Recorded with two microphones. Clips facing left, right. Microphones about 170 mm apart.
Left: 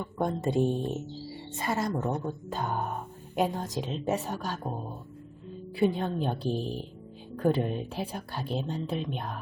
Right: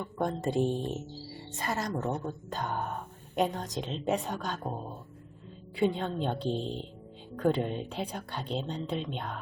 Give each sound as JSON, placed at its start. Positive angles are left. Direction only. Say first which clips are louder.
{"t": 0.0, "sound": "speech", "louder": "left 2 dB", "side_deg": 5}
{"t": 6.5, "sound": "speech", "louder": "left 1 dB", "side_deg": -25}
{"t": 7.4, "sound": "speech", "louder": "left 1 dB", "side_deg": 5}